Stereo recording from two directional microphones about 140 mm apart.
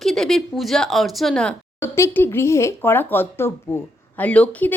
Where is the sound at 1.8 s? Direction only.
20° left (ahead or behind).